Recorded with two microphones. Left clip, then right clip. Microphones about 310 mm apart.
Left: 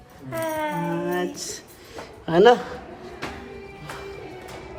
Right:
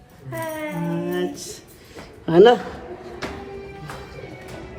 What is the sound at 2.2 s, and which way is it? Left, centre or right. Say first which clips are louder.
Speech: right 2 dB; centre.